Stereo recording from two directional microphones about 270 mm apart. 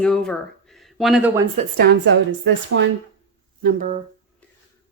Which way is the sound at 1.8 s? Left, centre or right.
Right.